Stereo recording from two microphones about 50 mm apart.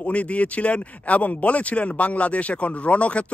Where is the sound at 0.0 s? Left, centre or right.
Left.